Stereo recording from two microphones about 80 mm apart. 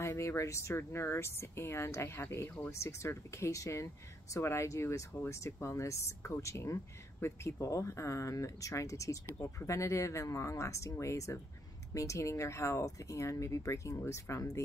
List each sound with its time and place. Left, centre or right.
0.0 s speech: left